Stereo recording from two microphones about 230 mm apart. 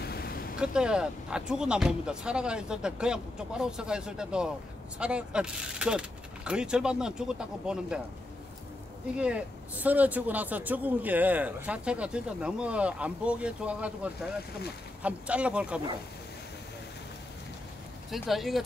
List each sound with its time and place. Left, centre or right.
0.0 s vehicle: left
0.6 s speech: centre
9.1 s speech: centre
18.1 s speech: centre